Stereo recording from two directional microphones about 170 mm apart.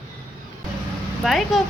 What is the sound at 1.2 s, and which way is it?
Speech, centre (ahead or behind).